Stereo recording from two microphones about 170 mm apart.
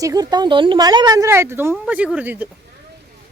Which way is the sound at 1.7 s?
5° right (ahead or behind).